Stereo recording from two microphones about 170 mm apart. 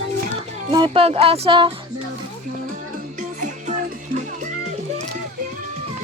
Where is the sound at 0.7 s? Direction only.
30° right (ahead or behind).